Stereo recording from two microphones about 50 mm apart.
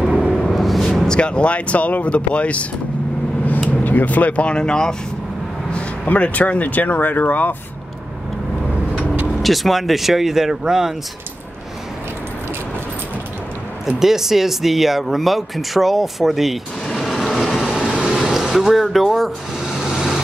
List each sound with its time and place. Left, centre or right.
0.2 s a sound: centre
0.8 s speech: centre
3.8 s speech: left; by 4.9 s centre
6.0 s speech: left
9.4 s speech: centre
13.8 s speech: centre
16.8 s vehicle: centre
17.2 s train: centre
18.0 s vehicle: centre